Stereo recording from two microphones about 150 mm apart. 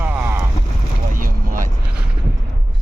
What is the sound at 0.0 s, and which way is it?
Boat, 10° right (ahead or behind).